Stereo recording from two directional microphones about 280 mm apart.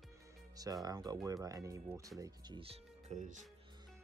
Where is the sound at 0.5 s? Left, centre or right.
Centre.